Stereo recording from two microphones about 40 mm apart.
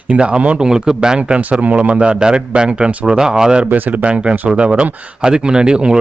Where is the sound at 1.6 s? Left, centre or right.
Right.